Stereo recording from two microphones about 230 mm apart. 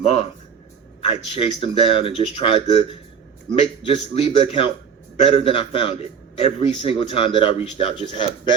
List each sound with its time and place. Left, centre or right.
0.0 s a man's voice: left